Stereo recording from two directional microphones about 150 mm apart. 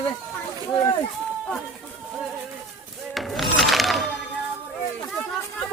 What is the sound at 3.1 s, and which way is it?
Music, centre (ahead or behind).